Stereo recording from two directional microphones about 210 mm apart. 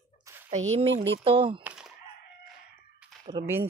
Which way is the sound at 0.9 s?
60° right (ahead or behind).